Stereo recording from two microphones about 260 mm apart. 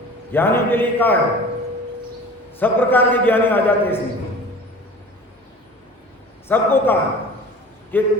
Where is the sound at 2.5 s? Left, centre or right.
Centre.